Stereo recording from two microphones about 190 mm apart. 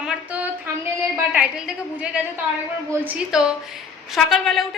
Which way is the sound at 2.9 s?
10° right (ahead or behind).